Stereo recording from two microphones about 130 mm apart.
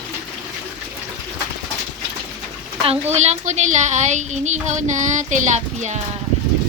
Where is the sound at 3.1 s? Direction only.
60° right (ahead or behind).